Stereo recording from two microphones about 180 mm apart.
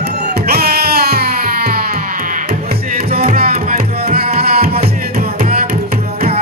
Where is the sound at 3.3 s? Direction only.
55° right (ahead or behind).